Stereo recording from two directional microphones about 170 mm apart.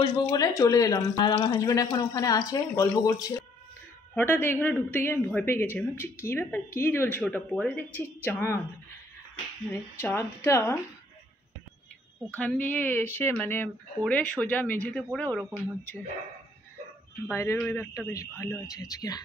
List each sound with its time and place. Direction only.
0.0 s speech: 20° left (ahead or behind)
9.7 s speech: 15° left (ahead or behind)
12.4 s speech: 10° left (ahead or behind)
17.3 s speech: 15° left (ahead or behind)